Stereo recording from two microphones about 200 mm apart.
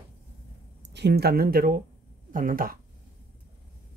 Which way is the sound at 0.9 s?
55° right (ahead or behind).